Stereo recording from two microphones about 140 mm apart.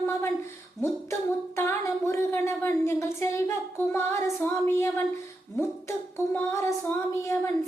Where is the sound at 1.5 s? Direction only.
20° left (ahead or behind).